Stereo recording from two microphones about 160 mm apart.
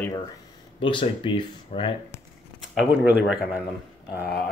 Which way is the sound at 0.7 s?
30° left (ahead or behind).